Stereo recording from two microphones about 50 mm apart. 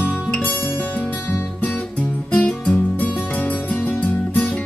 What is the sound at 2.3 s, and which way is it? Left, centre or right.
Music, left.